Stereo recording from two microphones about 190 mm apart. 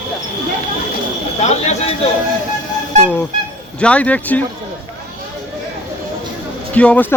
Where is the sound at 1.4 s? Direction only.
35° left (ahead or behind).